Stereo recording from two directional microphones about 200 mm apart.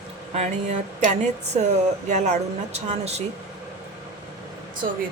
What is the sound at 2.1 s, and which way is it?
Speech, 35° right (ahead or behind).